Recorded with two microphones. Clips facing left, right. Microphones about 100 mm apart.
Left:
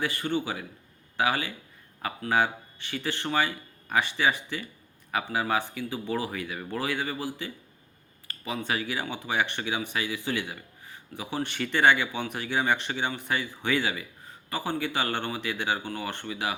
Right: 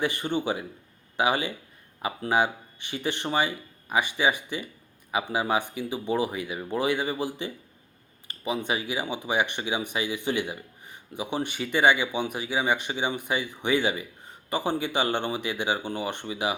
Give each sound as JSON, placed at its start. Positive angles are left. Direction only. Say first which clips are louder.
{"t": 0.0, "sound": "a man's voice", "louder": "right 2 dB", "side_deg": -20}